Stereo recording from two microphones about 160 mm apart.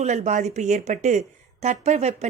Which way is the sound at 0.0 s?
45° right (ahead or behind).